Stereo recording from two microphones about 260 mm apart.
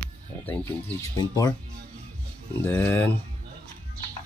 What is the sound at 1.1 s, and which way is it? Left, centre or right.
Speech, centre.